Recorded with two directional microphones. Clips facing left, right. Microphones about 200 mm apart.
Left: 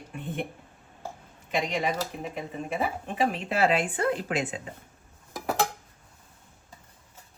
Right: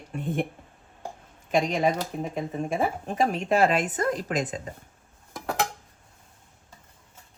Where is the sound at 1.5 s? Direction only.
50° right (ahead or behind).